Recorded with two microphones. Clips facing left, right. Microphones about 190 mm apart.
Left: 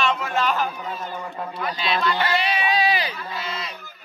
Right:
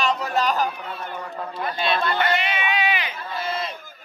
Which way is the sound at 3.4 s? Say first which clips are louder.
Right 8 dB; 50° right (ahead or behind).